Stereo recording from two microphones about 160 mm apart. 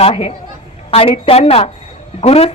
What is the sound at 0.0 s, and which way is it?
Speech, 40° left (ahead or behind).